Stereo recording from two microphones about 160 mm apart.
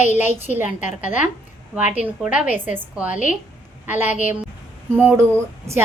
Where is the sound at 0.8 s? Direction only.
50° left (ahead or behind).